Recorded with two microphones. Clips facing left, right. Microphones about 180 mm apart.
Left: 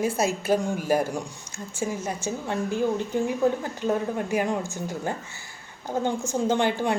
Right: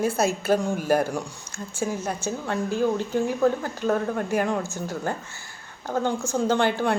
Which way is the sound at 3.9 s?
15° left (ahead or behind).